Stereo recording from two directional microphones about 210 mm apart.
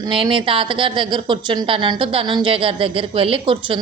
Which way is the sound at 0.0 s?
25° right (ahead or behind).